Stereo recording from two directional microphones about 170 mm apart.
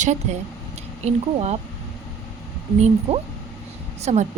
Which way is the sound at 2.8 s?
35° right (ahead or behind).